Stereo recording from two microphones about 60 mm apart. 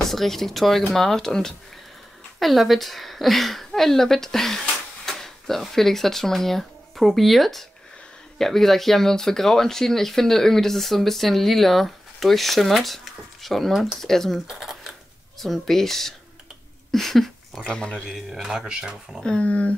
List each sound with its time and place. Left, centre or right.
0.0 s a woman's voice: centre
14.5 s a sound: centre
15.3 s speech: centre
18.0 s speech: centre
19.2 s speech: centre